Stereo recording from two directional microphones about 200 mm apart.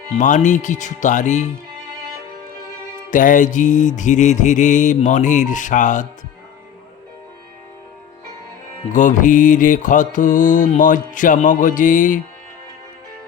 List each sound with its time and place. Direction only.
0.2 s music: 40° left (ahead or behind)
3.1 s music: 40° left (ahead or behind)
8.9 s music: 40° left (ahead or behind)